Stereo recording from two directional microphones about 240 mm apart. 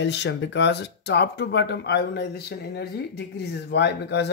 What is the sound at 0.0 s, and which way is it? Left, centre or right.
Speech, left.